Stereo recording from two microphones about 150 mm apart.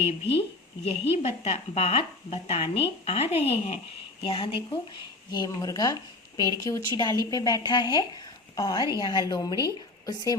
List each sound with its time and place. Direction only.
0.0 s a woman's voice: 40° left (ahead or behind)
5.3 s a woman's voice: 25° left (ahead or behind)